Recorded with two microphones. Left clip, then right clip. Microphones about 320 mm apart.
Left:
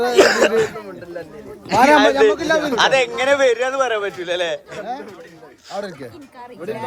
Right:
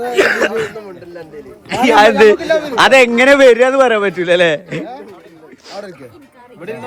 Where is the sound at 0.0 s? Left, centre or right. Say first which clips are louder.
Even; centre.